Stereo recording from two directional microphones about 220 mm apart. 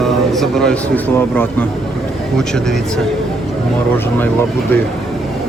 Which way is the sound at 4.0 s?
10° left (ahead or behind).